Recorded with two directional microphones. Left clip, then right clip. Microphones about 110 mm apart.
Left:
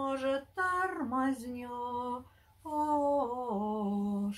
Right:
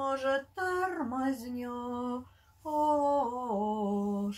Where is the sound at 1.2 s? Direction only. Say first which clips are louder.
Even; 30° left (ahead or behind).